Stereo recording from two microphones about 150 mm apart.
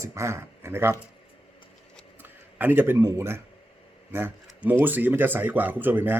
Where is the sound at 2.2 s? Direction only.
10° right (ahead or behind).